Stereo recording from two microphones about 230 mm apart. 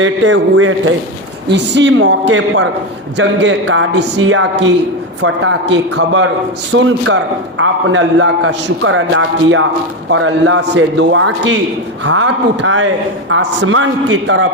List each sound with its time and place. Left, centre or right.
0.0 s a man's voice: right